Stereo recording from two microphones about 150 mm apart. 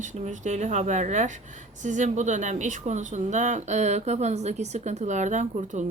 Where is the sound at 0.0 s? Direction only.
55° right (ahead or behind).